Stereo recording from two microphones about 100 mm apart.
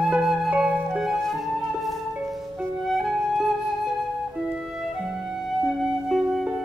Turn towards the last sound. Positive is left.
turn(degrees=-5)  # may be behind; listen again after turning